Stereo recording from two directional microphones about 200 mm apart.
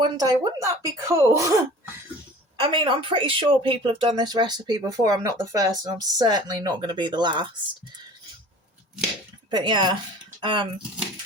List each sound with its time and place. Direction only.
0.0 s speech: 20° right (ahead or behind)
2.6 s a woman's voice: 25° right (ahead or behind)
9.5 s a woman's voice: 20° right (ahead or behind)